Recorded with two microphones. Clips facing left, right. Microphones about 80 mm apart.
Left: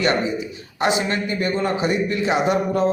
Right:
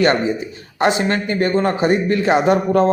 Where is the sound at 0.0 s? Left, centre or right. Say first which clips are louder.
Right 4 dB; right.